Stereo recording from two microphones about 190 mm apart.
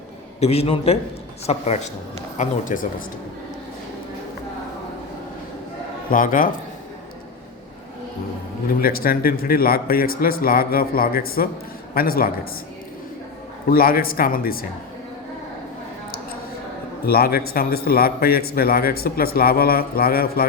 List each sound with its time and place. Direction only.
0.3 s a man's voice: 35° left (ahead or behind)
6.1 s a man's voice: 45° left (ahead or behind)
8.8 s a man's voice: 50° left (ahead or behind)
13.7 s a man's voice: 50° left (ahead or behind)
17.1 s a man's voice: 55° left (ahead or behind)